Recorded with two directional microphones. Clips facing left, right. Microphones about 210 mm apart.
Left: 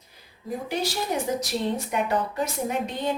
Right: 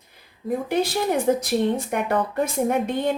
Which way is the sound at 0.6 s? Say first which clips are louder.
Right 5 dB; 55° right (ahead or behind).